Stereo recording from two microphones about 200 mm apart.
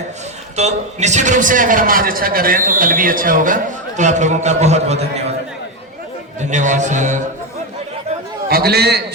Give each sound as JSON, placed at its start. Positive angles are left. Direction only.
{"t": 0.5, "sound": "a man's voice", "side_deg": -35}
{"t": 6.4, "sound": "a man's voice", "side_deg": -35}
{"t": 8.4, "sound": "a man's voice", "side_deg": -50}